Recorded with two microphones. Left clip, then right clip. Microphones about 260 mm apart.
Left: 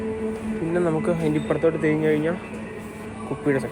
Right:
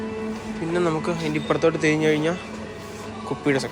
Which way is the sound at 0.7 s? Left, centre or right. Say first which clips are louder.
Even; centre.